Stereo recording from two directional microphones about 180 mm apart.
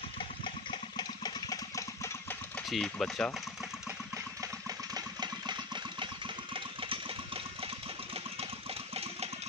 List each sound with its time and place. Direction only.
0.7 s a sound: 25° left (ahead or behind)
2.7 s speech: 5° left (ahead or behind)
4.4 s engine: 20° right (ahead or behind)